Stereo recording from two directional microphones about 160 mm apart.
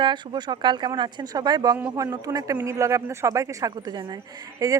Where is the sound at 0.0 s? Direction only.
30° right (ahead or behind).